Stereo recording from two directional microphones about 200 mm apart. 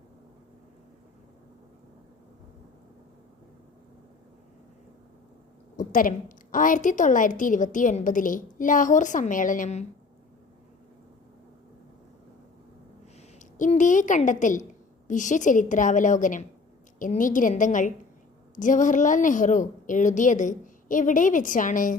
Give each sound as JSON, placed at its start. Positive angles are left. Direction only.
{"t": 5.7, "sound": "a woman's voice", "side_deg": 40}
{"t": 13.4, "sound": "a woman's voice", "side_deg": 40}